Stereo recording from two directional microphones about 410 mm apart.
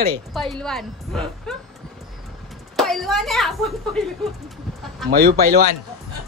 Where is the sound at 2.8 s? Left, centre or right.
Centre.